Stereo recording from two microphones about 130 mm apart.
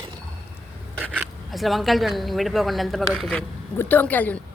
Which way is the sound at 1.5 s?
Centre (ahead or behind).